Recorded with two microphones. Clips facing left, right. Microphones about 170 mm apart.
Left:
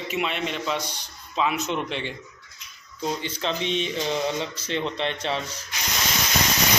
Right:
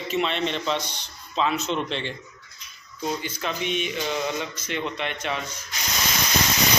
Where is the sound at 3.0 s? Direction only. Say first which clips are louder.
Left 1 dB; 30° left (ahead or behind).